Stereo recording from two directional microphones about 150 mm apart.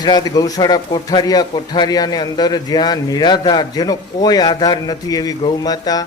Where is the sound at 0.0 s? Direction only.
25° left (ahead or behind).